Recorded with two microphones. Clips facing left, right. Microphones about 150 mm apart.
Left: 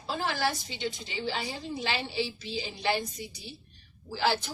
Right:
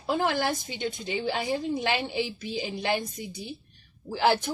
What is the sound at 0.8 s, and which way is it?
Speech, 50° right (ahead or behind).